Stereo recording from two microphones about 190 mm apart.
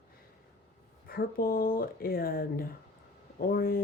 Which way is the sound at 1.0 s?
50° left (ahead or behind).